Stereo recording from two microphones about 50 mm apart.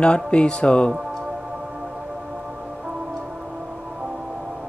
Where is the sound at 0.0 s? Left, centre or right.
Left.